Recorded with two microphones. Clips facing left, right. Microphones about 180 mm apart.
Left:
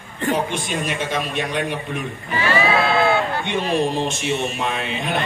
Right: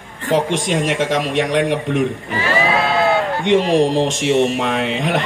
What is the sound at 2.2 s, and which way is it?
Sheep, 20° right (ahead or behind).